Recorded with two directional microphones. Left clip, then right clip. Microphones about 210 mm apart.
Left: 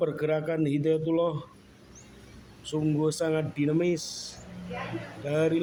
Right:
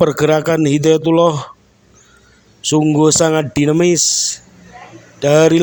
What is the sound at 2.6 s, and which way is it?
A man's voice, 45° right (ahead or behind).